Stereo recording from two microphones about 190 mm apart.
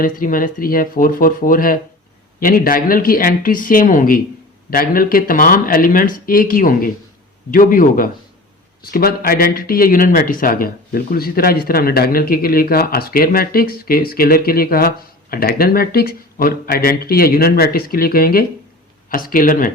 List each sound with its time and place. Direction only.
0.0 s speech: 45° left (ahead or behind)